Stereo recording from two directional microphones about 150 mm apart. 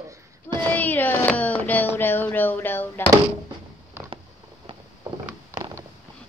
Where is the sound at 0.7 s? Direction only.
10° left (ahead or behind).